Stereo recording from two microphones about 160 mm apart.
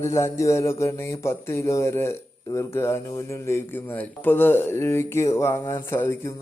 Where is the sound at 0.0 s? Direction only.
15° left (ahead or behind).